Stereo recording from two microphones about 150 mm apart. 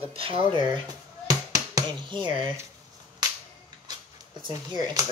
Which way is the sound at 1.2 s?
25° right (ahead or behind).